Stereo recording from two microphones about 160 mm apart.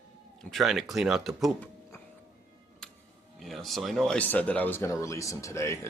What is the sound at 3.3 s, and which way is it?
Speech, centre (ahead or behind).